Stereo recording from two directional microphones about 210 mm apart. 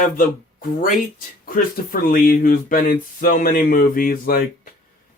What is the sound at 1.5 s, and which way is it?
Speech, 40° left (ahead or behind).